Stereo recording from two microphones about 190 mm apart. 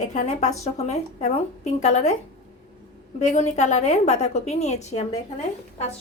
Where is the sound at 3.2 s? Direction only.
40° left (ahead or behind).